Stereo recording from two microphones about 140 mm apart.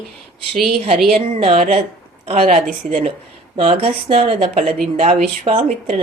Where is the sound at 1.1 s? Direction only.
50° right (ahead or behind).